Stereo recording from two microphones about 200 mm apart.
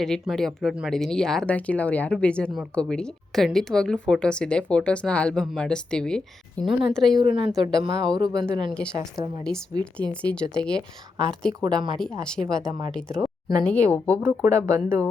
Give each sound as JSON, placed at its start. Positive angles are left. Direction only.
{"t": 0.0, "sound": "speech", "side_deg": 0}
{"t": 7.2, "sound": "speech", "side_deg": -25}
{"t": 8.7, "sound": "speech", "side_deg": 5}
{"t": 9.0, "sound": "speech", "side_deg": -15}
{"t": 9.4, "sound": "speech", "side_deg": 5}
{"t": 11.6, "sound": "speech", "side_deg": -20}
{"t": 11.9, "sound": "speech", "side_deg": 5}
{"t": 14.2, "sound": "speech", "side_deg": -15}